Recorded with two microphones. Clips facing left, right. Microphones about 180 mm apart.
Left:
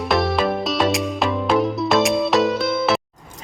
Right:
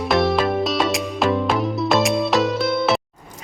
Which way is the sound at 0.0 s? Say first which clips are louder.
Right 1 dB; centre (ahead or behind).